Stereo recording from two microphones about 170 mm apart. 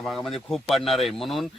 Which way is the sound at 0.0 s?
Centre (ahead or behind).